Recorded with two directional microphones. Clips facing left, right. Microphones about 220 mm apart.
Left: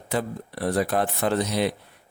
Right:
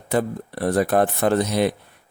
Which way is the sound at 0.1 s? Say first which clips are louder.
Right 5 dB; 50° right (ahead or behind).